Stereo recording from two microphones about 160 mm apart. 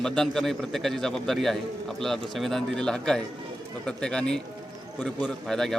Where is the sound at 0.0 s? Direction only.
5° left (ahead or behind).